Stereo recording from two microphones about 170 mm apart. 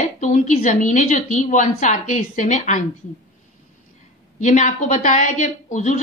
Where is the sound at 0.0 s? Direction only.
45° left (ahead or behind).